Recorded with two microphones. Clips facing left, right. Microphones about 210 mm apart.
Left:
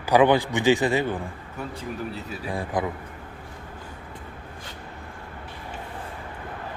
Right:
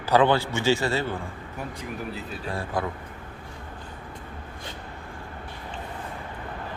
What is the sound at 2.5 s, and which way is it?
Speech, 15° left (ahead or behind).